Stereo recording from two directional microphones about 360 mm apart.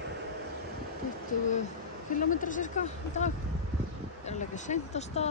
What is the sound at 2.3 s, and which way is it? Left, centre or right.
A woman's voice, left.